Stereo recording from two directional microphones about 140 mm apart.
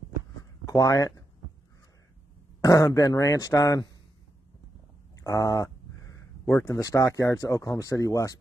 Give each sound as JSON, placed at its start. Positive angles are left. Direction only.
{"t": 0.7, "sound": "speech", "side_deg": 25}
{"t": 2.6, "sound": "speech", "side_deg": 25}
{"t": 5.2, "sound": "a sound", "side_deg": 25}
{"t": 6.5, "sound": "speech", "side_deg": 25}